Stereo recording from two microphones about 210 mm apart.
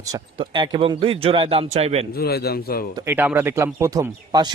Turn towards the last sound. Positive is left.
turn(degrees=-20)  # may be behind; listen again after turning